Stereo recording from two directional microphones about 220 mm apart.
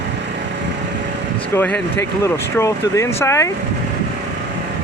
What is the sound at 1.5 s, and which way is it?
Speech, 5° left (ahead or behind).